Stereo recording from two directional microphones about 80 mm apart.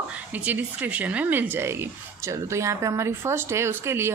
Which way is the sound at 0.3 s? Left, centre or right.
Right.